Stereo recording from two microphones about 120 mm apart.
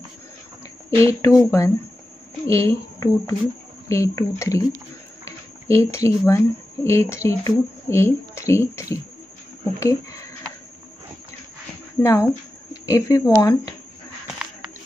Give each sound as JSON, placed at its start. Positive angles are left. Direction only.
{"t": 0.8, "sound": "a woman's voice", "side_deg": 25}
{"t": 12.0, "sound": "a woman's voice", "side_deg": 25}
{"t": 14.2, "sound": "a sound", "side_deg": -5}